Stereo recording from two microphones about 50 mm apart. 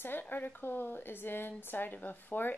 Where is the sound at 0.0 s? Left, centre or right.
Left.